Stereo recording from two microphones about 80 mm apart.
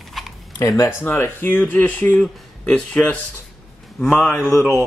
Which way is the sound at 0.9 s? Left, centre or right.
Left.